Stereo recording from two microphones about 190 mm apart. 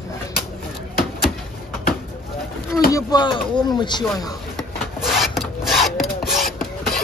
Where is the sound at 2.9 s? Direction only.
20° left (ahead or behind).